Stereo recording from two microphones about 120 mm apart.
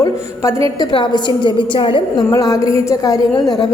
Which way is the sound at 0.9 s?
40° left (ahead or behind).